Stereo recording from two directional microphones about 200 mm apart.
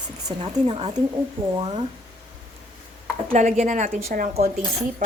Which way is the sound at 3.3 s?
40° right (ahead or behind).